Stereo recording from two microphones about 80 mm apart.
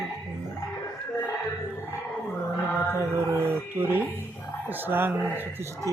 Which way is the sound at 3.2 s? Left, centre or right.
Right.